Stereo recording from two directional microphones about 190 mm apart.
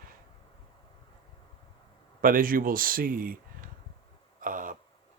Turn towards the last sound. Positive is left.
turn(degrees=-45)  # may be behind; listen again after turning